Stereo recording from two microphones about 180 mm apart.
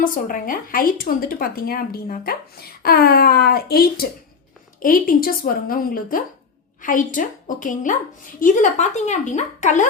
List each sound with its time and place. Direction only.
0.0 s a woman's voice: 50° left (ahead or behind)